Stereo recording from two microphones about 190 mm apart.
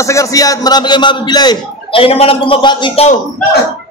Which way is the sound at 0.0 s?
15° left (ahead or behind).